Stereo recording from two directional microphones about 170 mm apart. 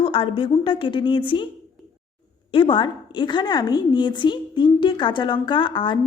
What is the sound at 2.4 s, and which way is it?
A woman's voice, 30° left (ahead or behind).